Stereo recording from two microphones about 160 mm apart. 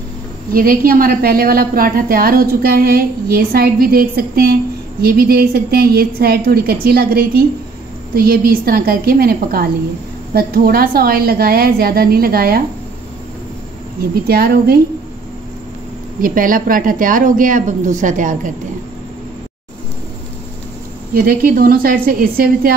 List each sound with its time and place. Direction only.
0.5 s a woman's voice: 65° right (ahead or behind)
14.2 s a woman's voice: 70° right (ahead or behind)
16.2 s a woman's voice: 60° right (ahead or behind)
21.1 s a woman's voice: 70° right (ahead or behind)